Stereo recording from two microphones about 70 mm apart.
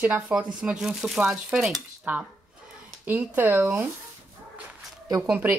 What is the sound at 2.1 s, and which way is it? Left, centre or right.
Speech, right.